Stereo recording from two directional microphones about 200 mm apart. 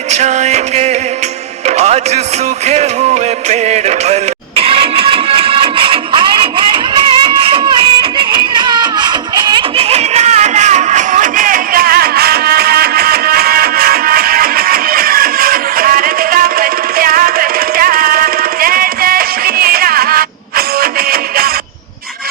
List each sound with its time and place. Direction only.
0.1 s music: 35° right (ahead or behind)
3.5 s music: 35° right (ahead or behind); by 21.5 s 50° right (ahead or behind)